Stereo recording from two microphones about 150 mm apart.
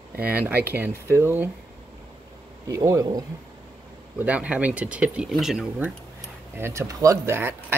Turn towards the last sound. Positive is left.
turn(degrees=-15)  # may be behind; listen again after turning